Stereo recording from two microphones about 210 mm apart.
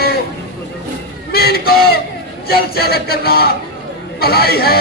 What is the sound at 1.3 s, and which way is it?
Speech, 50° left (ahead or behind).